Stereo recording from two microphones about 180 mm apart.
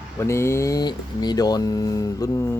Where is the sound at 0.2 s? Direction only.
15° left (ahead or behind).